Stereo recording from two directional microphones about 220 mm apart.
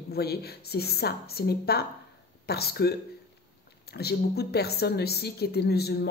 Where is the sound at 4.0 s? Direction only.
45° left (ahead or behind).